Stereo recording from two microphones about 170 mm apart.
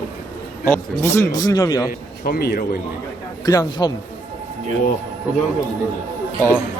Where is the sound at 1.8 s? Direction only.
65° left (ahead or behind).